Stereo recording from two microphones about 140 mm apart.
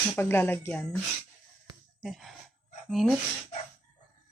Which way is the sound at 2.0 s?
Centre (ahead or behind).